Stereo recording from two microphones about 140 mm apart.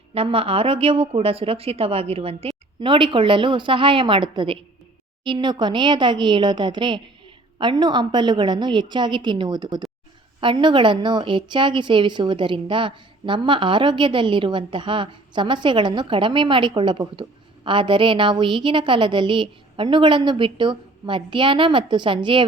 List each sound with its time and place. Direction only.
0.1 s a woman's voice: 40° right (ahead or behind)